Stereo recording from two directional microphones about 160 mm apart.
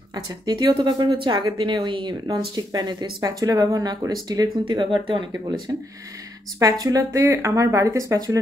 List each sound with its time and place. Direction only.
0.1 s speech: 25° right (ahead or behind)
6.6 s speech: 20° right (ahead or behind)